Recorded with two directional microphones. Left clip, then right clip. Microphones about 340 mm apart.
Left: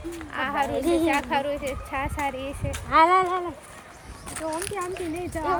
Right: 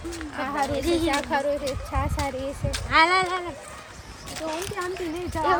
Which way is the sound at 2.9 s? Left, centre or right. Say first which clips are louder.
Left 1 dB; centre.